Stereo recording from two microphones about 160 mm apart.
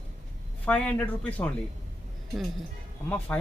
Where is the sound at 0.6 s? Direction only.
5° left (ahead or behind).